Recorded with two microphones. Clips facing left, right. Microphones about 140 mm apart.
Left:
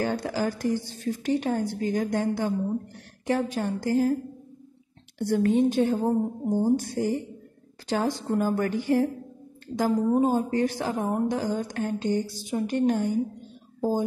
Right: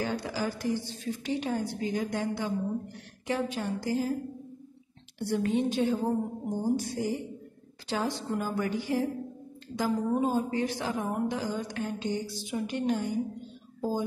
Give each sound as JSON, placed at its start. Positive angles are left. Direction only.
{"t": 0.0, "sound": "a woman's voice", "side_deg": 50}
{"t": 5.2, "sound": "a woman's voice", "side_deg": 50}